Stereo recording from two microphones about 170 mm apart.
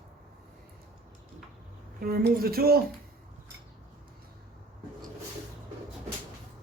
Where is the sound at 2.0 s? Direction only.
60° right (ahead or behind).